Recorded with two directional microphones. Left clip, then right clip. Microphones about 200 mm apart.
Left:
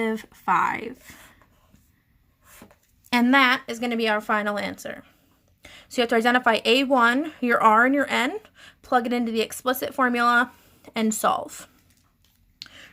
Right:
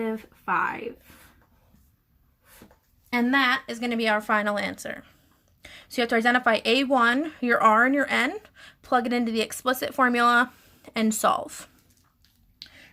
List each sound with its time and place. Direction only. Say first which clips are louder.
0.0 s speech: left 4 dB; 40° left (ahead or behind)
3.1 s a woman's voice: left 4 dB; 35° left (ahead or behind); by 11.7 s 5° left (ahead or behind)
12.5 s a sound: left 4 dB; 25° left (ahead or behind)